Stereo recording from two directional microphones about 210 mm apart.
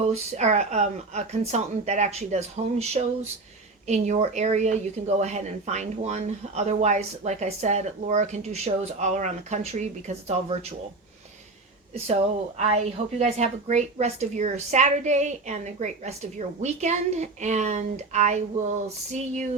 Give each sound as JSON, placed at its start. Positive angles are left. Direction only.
{"t": 0.1, "sound": "speech", "side_deg": -35}
{"t": 11.9, "sound": "speech", "side_deg": -30}